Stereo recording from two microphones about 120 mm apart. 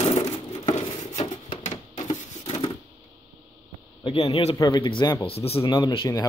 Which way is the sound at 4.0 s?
45° left (ahead or behind).